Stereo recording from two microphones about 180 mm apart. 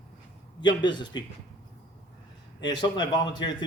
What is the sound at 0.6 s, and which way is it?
Speech, 25° left (ahead or behind).